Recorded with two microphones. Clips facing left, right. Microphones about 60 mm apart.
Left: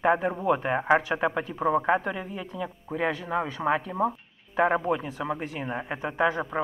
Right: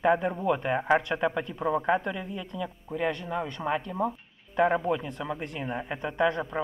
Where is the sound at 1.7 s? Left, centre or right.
Left.